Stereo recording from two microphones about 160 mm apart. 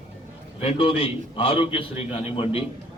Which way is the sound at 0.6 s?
35° left (ahead or behind).